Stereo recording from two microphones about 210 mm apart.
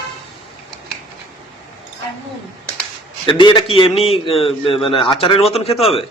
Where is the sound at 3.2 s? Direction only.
25° left (ahead or behind).